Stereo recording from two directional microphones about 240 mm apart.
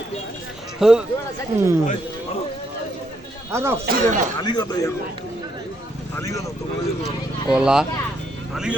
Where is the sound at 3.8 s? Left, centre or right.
Right.